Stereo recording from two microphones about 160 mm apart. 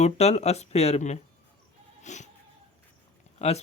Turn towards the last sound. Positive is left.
turn(degrees=40)  # may be behind; listen again after turning